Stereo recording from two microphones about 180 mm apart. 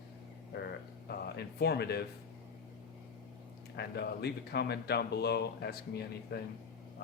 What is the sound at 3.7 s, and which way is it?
Speech, 65° left (ahead or behind).